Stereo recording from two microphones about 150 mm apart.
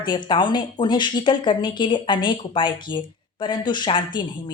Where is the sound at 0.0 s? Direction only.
30° left (ahead or behind).